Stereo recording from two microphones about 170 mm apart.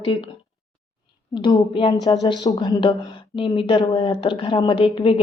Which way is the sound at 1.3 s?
25° left (ahead or behind).